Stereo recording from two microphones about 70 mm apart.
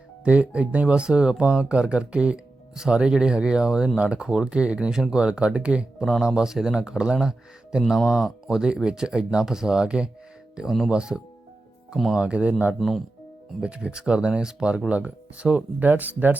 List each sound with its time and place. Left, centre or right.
0.3 s speech: centre